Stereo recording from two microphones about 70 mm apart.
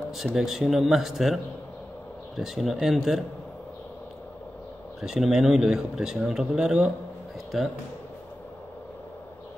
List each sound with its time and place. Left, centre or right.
0.1 s speech: centre
5.0 s speech: centre